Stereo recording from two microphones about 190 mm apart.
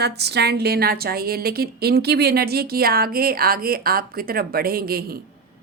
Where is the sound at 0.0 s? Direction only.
60° right (ahead or behind).